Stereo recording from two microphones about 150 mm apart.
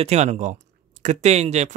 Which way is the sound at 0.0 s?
45° right (ahead or behind).